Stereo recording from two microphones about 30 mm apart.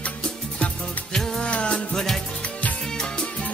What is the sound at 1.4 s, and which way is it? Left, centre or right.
Music, left.